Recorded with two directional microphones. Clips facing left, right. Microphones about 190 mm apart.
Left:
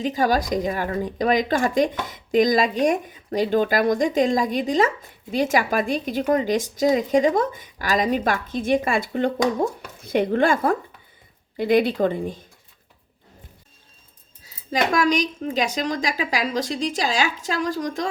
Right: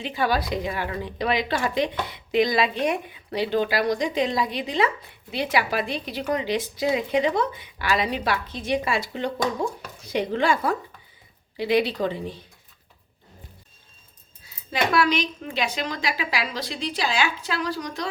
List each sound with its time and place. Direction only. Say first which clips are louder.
0.0 s speech: left 4 dB; 40° left (ahead or behind)
14.4 s speech: left 3 dB; 40° left (ahead or behind)